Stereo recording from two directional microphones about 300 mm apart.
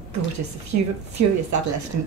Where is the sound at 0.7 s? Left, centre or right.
Right.